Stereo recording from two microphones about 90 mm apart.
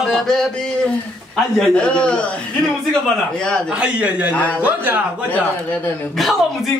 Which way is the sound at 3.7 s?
10° right (ahead or behind).